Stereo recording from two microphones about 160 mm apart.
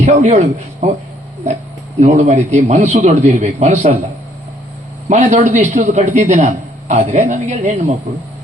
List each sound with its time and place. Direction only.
0.0 s a man's voice: 50° right (ahead or behind)
2.0 s a man's voice: 45° right (ahead or behind)
5.0 s a man's voice: 50° right (ahead or behind)